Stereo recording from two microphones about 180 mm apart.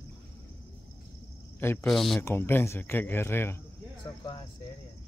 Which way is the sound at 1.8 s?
Centre (ahead or behind).